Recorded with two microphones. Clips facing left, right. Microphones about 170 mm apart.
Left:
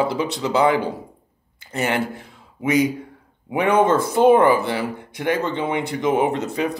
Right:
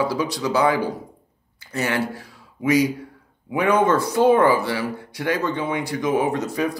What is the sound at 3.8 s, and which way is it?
Speech, 25° left (ahead or behind).